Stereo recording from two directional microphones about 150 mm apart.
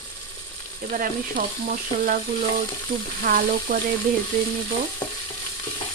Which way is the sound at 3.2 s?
70° right (ahead or behind).